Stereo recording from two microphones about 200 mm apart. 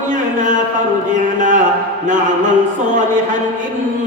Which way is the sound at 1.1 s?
40° right (ahead or behind).